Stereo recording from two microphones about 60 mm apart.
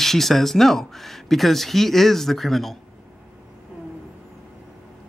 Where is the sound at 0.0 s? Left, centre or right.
Centre.